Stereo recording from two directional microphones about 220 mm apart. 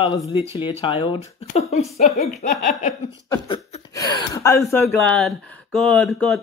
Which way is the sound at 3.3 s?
20° left (ahead or behind).